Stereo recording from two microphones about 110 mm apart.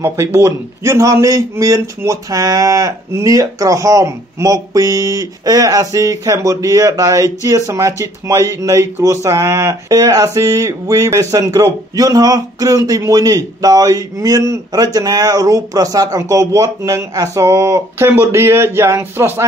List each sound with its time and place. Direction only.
0.0 s a man's voice: 25° right (ahead or behind)